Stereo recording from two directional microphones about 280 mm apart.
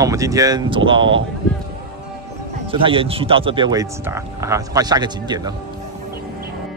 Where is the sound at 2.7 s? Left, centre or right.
Centre.